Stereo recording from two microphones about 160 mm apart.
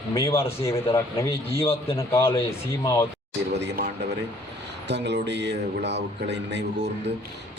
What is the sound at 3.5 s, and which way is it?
Speech, 90° right.